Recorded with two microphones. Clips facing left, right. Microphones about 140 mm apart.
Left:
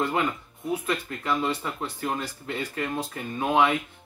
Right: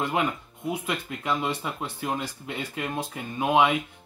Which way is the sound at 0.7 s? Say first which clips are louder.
Left 2 dB; 15° right (ahead or behind).